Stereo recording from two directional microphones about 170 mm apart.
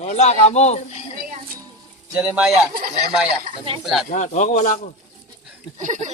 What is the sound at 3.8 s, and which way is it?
Speech, centre (ahead or behind).